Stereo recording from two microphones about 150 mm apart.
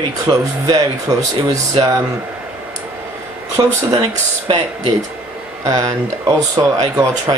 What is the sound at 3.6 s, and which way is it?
Speech, 25° right (ahead or behind).